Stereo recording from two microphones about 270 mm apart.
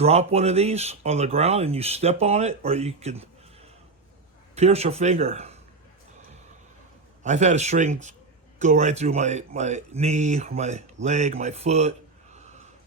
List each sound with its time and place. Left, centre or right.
0.0 s speech: right
7.2 s speech: right